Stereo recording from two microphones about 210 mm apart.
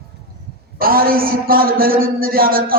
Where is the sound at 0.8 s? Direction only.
45° right (ahead or behind).